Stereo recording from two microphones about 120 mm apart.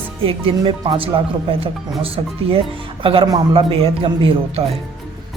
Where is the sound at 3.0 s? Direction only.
50° right (ahead or behind).